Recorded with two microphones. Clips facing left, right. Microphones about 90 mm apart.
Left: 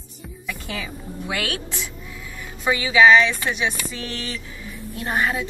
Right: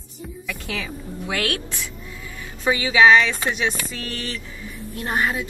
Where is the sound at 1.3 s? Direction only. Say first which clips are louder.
Right 2 dB; 15° left (ahead or behind).